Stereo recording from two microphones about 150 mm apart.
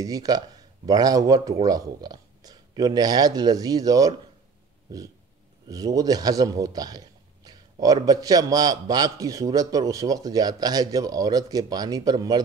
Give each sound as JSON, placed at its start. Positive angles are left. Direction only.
{"t": 0.0, "sound": "a man's voice", "side_deg": -25}
{"t": 5.7, "sound": "a man's voice", "side_deg": -25}